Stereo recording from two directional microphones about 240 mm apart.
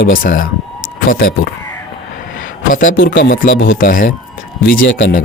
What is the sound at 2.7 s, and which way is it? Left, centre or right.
Speech, left.